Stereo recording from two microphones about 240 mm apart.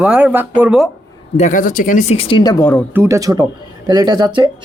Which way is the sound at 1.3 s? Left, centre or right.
Left.